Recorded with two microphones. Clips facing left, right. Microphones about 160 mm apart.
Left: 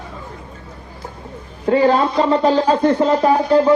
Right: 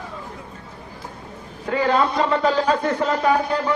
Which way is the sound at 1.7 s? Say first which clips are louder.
Left 5 dB; 35° left (ahead or behind).